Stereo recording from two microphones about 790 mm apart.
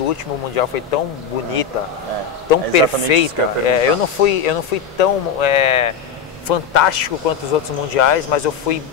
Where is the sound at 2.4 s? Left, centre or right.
Left.